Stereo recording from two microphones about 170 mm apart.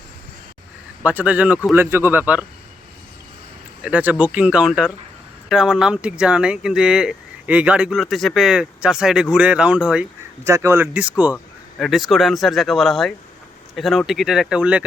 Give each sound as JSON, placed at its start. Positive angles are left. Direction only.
{"t": 1.0, "sound": "speech", "side_deg": -10}
{"t": 3.8, "sound": "speech", "side_deg": -10}
{"t": 11.8, "sound": "speech", "side_deg": 0}